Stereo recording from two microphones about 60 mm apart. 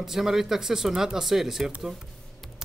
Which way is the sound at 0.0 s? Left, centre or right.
Centre.